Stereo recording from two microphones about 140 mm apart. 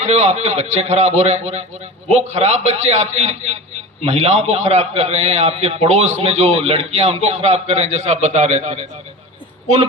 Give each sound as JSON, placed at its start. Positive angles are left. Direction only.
{"t": 0.0, "sound": "a man's voice", "side_deg": -55}